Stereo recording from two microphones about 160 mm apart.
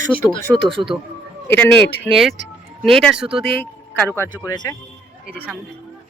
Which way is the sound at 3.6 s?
10° left (ahead or behind).